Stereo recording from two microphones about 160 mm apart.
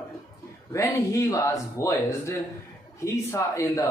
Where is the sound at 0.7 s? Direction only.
15° left (ahead or behind).